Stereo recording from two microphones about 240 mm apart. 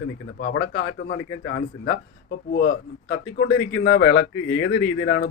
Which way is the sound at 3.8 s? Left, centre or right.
Left.